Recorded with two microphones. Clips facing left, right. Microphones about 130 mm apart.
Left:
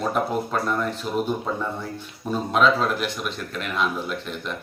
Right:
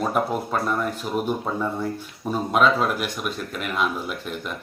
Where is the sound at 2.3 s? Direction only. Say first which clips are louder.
Even; 5° right (ahead or behind).